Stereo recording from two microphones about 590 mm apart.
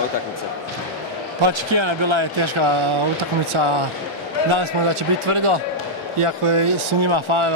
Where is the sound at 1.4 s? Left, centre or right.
Right.